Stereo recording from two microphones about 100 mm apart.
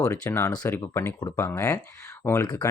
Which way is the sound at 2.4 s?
45° left (ahead or behind).